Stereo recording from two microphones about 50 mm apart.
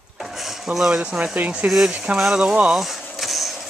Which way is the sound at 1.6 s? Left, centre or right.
Centre.